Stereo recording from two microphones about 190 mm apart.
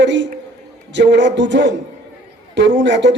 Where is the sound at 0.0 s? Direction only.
70° right (ahead or behind).